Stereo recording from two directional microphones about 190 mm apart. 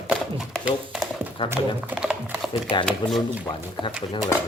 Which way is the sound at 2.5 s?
25° left (ahead or behind).